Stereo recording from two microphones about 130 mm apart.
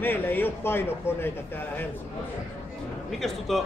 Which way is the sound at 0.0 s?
15° left (ahead or behind).